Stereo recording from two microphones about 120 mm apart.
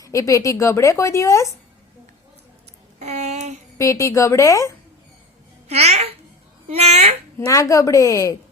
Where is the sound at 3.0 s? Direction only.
65° right (ahead or behind).